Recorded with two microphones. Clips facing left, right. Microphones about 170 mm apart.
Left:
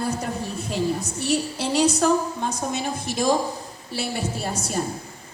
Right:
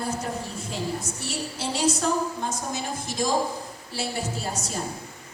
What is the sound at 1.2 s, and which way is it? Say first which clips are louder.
A woman's voice: left 10 dB; 65° left (ahead or behind).